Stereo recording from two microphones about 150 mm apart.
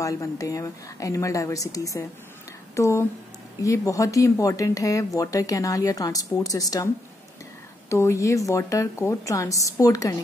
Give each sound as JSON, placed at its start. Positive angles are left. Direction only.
{"t": 0.0, "sound": "speech", "side_deg": 20}
{"t": 7.9, "sound": "speech", "side_deg": 20}